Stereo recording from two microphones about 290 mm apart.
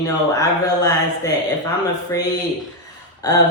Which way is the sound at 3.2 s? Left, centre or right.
Centre.